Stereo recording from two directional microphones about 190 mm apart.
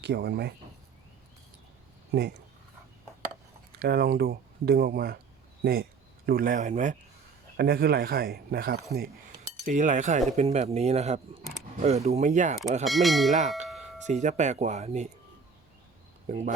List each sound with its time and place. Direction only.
0.0 s speech: 60° right (ahead or behind)
2.1 s speech: 60° right (ahead or behind)
3.8 s speech: 55° right (ahead or behind)
7.5 s speech: 55° right (ahead or behind)
9.6 s speech: 40° right (ahead or behind)
12.8 s bell: centre (ahead or behind)
14.1 s speech: 40° right (ahead or behind)
16.3 s speech: 35° right (ahead or behind)